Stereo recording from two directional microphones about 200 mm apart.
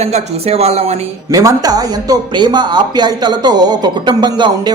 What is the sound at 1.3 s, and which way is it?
Speech, 15° right (ahead or behind).